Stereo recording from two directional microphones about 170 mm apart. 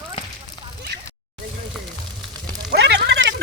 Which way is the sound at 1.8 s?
Centre (ahead or behind).